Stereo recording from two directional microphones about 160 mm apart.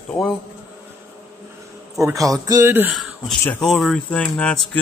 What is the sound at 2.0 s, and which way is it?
Speech, 20° right (ahead or behind).